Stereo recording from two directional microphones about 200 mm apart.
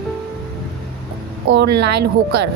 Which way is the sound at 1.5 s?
55° right (ahead or behind).